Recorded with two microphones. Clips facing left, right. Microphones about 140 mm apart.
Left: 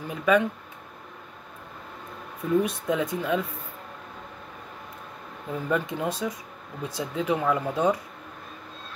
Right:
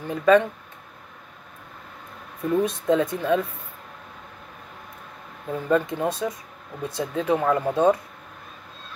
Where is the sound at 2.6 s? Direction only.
10° left (ahead or behind).